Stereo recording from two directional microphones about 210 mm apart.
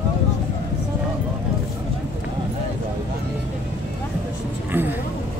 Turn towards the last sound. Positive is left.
turn(degrees=-10)  # may be behind; listen again after turning